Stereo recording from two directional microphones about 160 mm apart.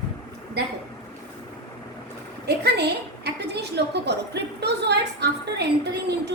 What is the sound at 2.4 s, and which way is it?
A woman's voice, 90° right.